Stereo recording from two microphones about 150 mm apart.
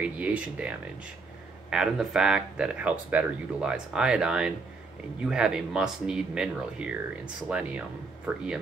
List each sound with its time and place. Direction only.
0.0 s speech: 10° right (ahead or behind)